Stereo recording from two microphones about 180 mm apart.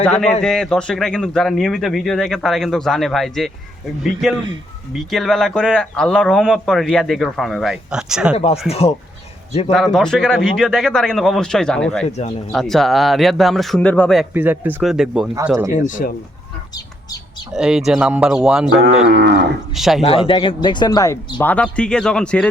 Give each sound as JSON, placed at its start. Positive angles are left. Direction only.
{"t": 0.0, "sound": "a man's voice", "side_deg": 5}
{"t": 8.7, "sound": "speech", "side_deg": 35}
{"t": 9.7, "sound": "a man's voice", "side_deg": 0}
{"t": 12.0, "sound": "speech", "side_deg": 40}
{"t": 12.5, "sound": "a man's voice", "side_deg": 0}
{"t": 14.3, "sound": "a man's voice", "side_deg": -10}
{"t": 15.4, "sound": "speech", "side_deg": -15}
{"t": 15.9, "sound": "speech", "side_deg": 45}
{"t": 17.5, "sound": "a man's voice", "side_deg": -5}
{"t": 19.0, "sound": "cattle", "side_deg": -75}
{"t": 19.7, "sound": "a man's voice", "side_deg": 0}
{"t": 20.0, "sound": "speech", "side_deg": 30}
{"t": 21.3, "sound": "a man's voice", "side_deg": 10}